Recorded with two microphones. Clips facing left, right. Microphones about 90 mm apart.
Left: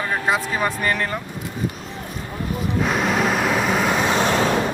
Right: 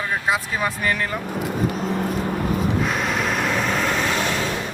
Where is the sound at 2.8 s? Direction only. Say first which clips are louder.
Left 3 dB; centre (ahead or behind); by 4.2 s 15° left (ahead or behind).